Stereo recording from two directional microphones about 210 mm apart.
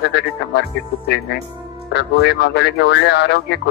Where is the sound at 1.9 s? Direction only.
50° left (ahead or behind).